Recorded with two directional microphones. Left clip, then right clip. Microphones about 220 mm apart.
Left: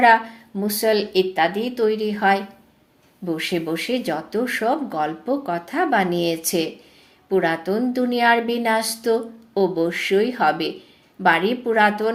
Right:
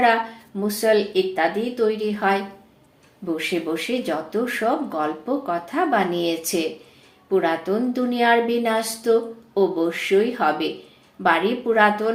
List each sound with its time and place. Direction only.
0.0 s a woman's voice: 40° left (ahead or behind)